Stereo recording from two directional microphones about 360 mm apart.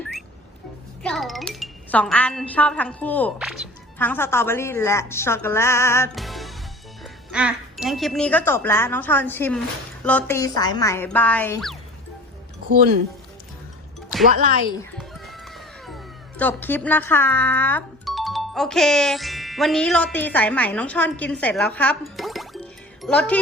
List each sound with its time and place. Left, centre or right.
1.0 s speech: centre
14.3 s speech: right
16.4 s speech: centre